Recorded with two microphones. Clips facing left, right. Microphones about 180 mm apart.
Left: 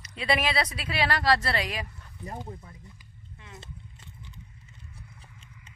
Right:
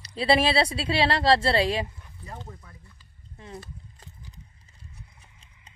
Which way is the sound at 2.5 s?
20° left (ahead or behind).